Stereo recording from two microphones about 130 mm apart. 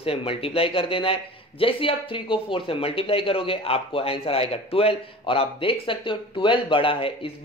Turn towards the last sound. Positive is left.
turn(degrees=45)  # may be behind; listen again after turning